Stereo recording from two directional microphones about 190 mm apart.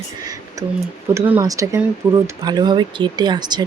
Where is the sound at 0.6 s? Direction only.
15° right (ahead or behind).